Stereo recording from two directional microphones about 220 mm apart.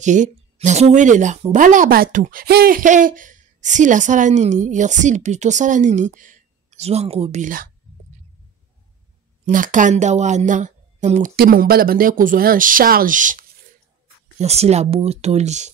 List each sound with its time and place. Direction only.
0.0 s speech: 35° right (ahead or behind)
9.5 s speech: 35° right (ahead or behind)